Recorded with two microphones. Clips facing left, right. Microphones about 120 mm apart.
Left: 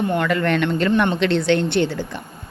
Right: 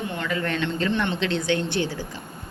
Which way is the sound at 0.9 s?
50° left (ahead or behind).